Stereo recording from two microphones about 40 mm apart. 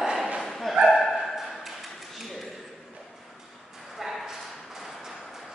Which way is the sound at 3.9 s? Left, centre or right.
Centre.